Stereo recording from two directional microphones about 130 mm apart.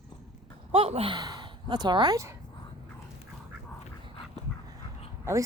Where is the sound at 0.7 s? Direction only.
50° right (ahead or behind).